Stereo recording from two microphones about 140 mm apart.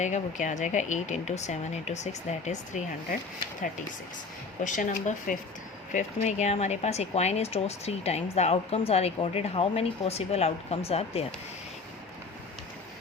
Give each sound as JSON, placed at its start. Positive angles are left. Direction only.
{"t": 0.0, "sound": "speech", "side_deg": 60}
{"t": 4.6, "sound": "speech", "side_deg": 70}
{"t": 5.9, "sound": "speech", "side_deg": 55}